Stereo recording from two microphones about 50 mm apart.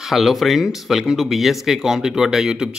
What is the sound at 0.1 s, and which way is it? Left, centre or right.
Speech, centre.